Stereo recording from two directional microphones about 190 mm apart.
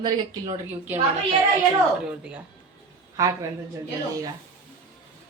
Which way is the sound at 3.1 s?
15° right (ahead or behind).